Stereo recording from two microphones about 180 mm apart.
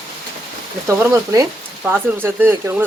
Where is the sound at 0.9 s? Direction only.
15° right (ahead or behind).